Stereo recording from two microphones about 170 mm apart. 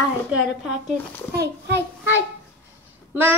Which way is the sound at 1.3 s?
80° right.